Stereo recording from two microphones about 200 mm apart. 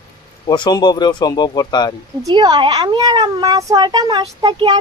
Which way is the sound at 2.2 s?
20° right (ahead or behind).